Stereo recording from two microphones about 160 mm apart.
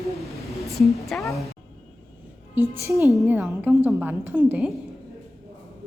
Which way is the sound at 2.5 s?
15° right (ahead or behind).